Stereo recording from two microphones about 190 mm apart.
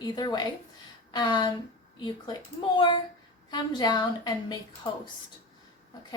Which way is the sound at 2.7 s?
25° left (ahead or behind).